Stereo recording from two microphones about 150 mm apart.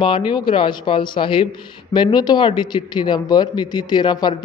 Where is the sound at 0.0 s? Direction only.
35° left (ahead or behind).